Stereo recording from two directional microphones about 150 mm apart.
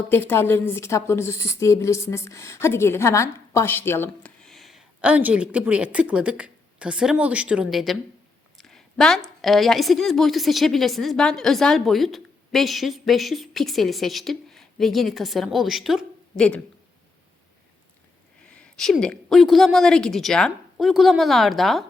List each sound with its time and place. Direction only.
0.1 s a woman's voice: 15° left (ahead or behind)
4.4 s speech: centre (ahead or behind)
8.5 s a sound: 5° left (ahead or behind)
9.4 s a woman's voice: centre (ahead or behind)
18.4 s a sound: 5° left (ahead or behind)
19.3 s a woman's voice: centre (ahead or behind)